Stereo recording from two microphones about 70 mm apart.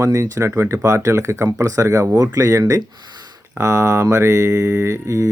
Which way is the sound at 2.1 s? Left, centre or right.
Right.